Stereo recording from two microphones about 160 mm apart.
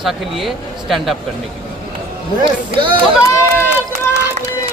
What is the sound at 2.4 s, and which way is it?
Speech, 30° right (ahead or behind).